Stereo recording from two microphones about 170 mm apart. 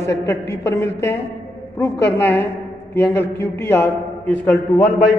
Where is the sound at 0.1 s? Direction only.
90° left.